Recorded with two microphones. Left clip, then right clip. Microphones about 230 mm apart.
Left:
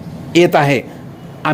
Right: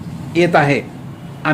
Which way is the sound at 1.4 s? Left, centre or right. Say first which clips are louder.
Even; left.